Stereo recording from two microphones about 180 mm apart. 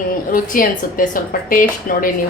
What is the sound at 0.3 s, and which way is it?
A woman's voice, 50° left (ahead or behind).